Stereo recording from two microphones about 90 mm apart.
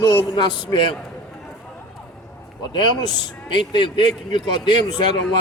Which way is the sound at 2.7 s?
55° left (ahead or behind).